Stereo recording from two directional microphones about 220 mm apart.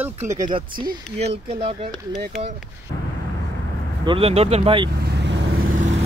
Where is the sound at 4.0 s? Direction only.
25° right (ahead or behind).